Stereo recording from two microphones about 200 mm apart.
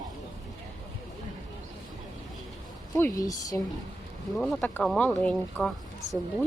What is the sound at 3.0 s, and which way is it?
Speech, 15° left (ahead or behind).